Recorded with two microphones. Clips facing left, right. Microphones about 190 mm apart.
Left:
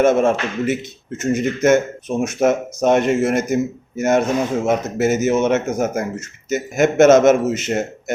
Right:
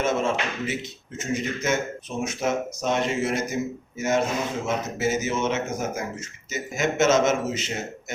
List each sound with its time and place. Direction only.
0.0 s speech: 55° left (ahead or behind)